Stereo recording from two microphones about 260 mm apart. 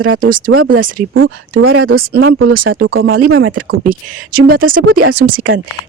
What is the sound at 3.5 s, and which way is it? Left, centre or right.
Speech, right.